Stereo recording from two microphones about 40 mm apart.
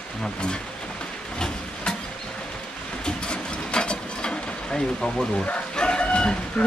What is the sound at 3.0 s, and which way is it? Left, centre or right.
Mechanisms, left.